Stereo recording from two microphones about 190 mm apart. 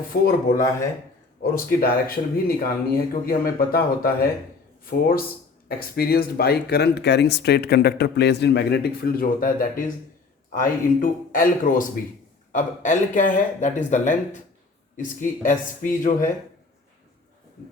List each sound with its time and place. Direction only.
0.1 s a man's voice: 50° left (ahead or behind)